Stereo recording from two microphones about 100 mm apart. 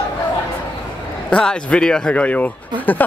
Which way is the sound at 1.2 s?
10° left (ahead or behind).